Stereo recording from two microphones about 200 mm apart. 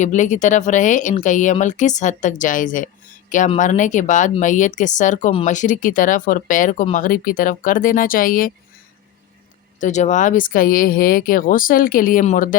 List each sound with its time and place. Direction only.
0.0 s speech: 40° left (ahead or behind)
9.8 s speech: 35° left (ahead or behind)